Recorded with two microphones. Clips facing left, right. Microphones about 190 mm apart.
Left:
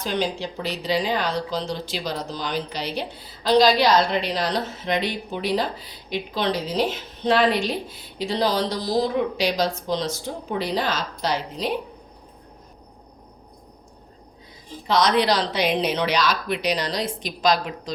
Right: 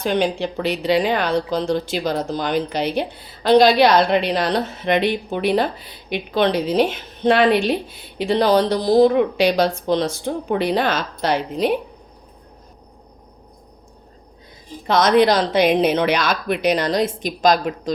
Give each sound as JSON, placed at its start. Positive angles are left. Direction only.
{"t": 0.0, "sound": "speech", "side_deg": -60}
{"t": 14.8, "sound": "speech", "side_deg": -50}